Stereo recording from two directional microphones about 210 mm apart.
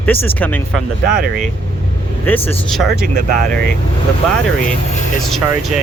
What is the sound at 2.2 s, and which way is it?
Speech, 10° left (ahead or behind).